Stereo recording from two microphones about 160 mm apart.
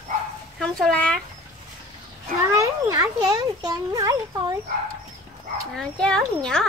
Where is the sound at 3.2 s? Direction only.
25° right (ahead or behind).